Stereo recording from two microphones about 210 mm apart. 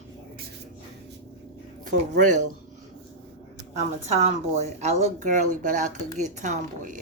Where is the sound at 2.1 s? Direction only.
35° right (ahead or behind).